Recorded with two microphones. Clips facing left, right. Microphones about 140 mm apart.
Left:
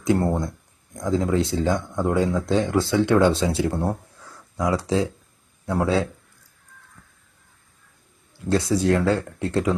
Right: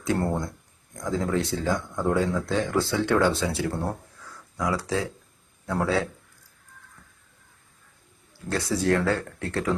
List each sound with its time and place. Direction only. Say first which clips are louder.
0.0 s speech: left 4 dB; 20° left (ahead or behind)
8.4 s speech: left 4 dB; 20° left (ahead or behind)